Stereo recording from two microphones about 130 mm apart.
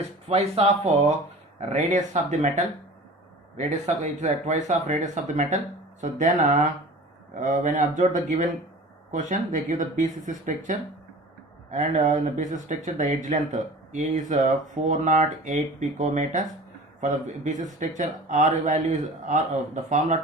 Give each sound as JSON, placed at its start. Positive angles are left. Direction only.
{"t": 0.3, "sound": "speech", "side_deg": -50}
{"t": 11.7, "sound": "speech", "side_deg": -65}